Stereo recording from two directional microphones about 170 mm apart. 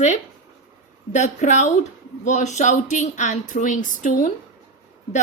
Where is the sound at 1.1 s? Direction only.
45° left (ahead or behind).